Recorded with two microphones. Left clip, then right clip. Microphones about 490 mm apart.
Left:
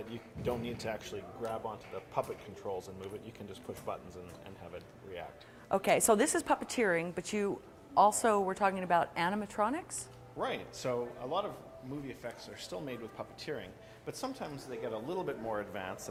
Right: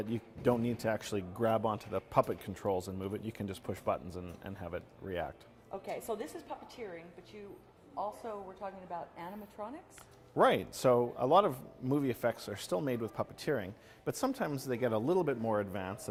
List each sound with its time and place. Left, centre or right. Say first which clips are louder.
0.1 s speech: right 5 dB; right
2.6 s speech: right 5 dB; right
5.7 s a woman's voice: left 12 dB; left
6.5 s a woman's voice: left 14 dB; left
7.9 s a woman's voice: left 13 dB; left
10.3 s speech: right 9 dB; right
11.3 s a man's voice: right 10 dB; right
12.0 s speech: right 10 dB; right